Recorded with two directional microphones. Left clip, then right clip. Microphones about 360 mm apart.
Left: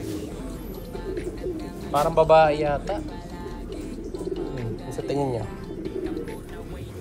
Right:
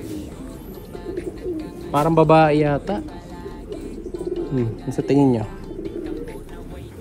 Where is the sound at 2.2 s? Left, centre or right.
Right.